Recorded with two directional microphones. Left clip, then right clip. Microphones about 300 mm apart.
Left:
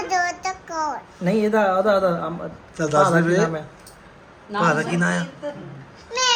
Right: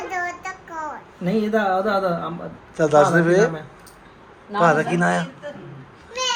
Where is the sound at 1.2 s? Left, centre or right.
Centre.